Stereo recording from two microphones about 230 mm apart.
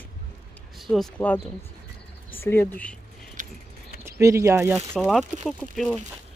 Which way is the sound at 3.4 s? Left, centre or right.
Right.